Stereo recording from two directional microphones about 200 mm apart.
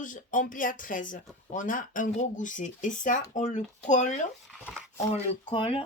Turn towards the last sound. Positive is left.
turn(degrees=25)  # may be behind; listen again after turning